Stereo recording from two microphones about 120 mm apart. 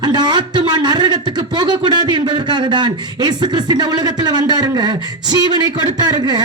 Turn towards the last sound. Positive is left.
turn(degrees=-35)  # may be behind; listen again after turning